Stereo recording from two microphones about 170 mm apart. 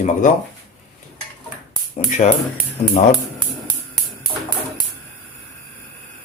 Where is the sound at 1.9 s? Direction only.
40° left (ahead or behind).